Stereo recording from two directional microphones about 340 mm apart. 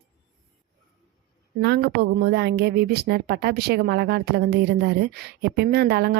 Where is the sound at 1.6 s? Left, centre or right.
Right.